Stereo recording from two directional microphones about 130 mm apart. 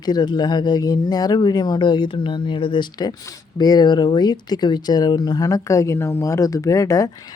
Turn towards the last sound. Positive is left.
turn(degrees=25)  # may be behind; listen again after turning